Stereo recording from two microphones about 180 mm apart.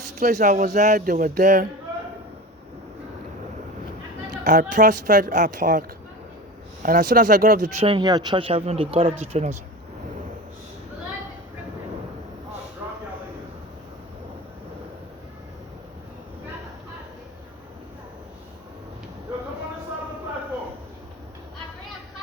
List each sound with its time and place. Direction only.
0.2 s speech: 45° right (ahead or behind)
4.4 s speech: 45° right (ahead or behind)
6.8 s speech: 50° right (ahead or behind); by 9.6 s 35° right (ahead or behind)
12.8 s a sound: 15° right (ahead or behind)